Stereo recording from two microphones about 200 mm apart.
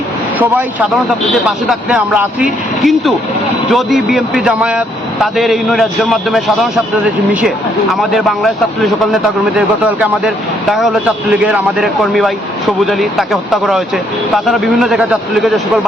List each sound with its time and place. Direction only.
0.3 s speech: 10° right (ahead or behind)
10.7 s speech: centre (ahead or behind)